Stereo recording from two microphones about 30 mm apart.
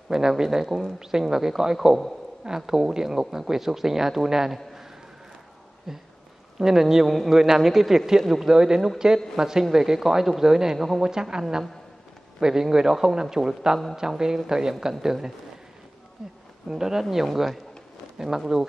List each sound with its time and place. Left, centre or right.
0.1 s speech: centre
5.9 s speech: centre
8.5 s speech: right
18.1 s speech: centre